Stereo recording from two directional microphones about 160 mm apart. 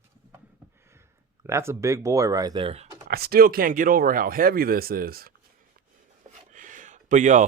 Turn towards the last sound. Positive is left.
turn(degrees=-50)  # may be behind; listen again after turning